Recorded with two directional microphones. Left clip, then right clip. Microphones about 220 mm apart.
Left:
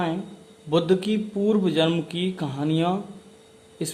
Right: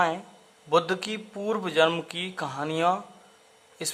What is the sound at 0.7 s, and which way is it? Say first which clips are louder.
Speech: left 2 dB; 25° right (ahead or behind).